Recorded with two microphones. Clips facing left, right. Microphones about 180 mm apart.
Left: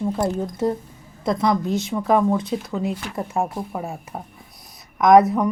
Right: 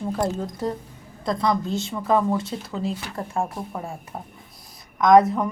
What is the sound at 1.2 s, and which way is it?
A woman's voice, 20° left (ahead or behind).